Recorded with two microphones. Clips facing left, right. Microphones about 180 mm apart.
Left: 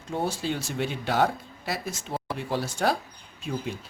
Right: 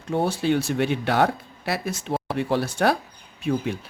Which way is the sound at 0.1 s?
65° right (ahead or behind).